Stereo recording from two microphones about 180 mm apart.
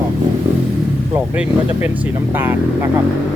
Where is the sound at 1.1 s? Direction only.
10° right (ahead or behind).